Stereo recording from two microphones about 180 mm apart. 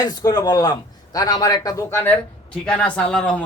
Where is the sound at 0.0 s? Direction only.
20° left (ahead or behind).